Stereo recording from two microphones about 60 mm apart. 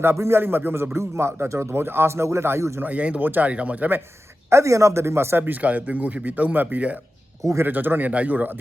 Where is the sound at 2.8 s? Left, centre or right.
Right.